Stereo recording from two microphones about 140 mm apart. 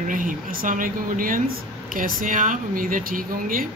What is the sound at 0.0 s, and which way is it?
Speech, 75° right (ahead or behind).